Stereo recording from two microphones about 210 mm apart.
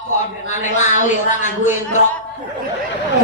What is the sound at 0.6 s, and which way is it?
A man's voice, 35° left (ahead or behind).